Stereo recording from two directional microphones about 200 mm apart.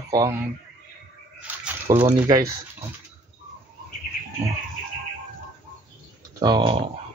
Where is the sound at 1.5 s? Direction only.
10° right (ahead or behind).